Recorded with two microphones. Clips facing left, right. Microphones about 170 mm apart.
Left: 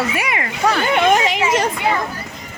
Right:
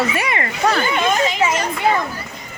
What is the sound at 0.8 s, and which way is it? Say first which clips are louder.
Speech: left 3 dB; 70° left (ahead or behind).